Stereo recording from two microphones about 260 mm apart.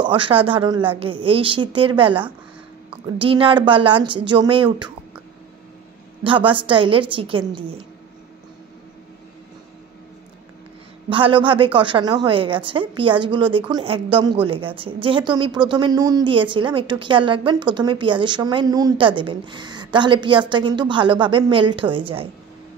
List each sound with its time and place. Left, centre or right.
0.0 s a woman's voice: centre
6.2 s a woman's voice: centre
11.1 s a woman's voice: centre